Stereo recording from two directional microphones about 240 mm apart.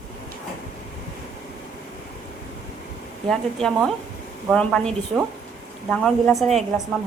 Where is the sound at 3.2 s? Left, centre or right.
Centre.